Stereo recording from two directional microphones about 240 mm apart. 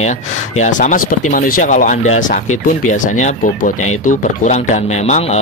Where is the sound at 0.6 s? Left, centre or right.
Left.